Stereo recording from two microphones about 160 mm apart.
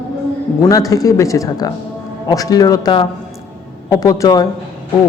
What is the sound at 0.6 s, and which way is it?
A man's voice, 20° left (ahead or behind).